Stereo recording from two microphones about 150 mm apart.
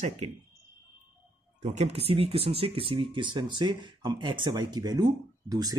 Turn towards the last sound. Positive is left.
turn(degrees=-25)  # may be behind; listen again after turning